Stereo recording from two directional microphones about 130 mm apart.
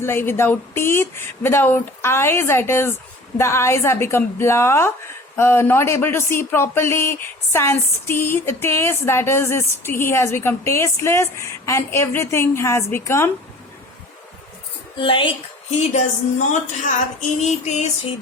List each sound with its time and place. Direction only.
0.0 s speech: 15° left (ahead or behind)
14.9 s a woman's voice: 40° left (ahead or behind)
16.5 s a woman's voice: 70° left (ahead or behind)
17.4 s music: 60° left (ahead or behind)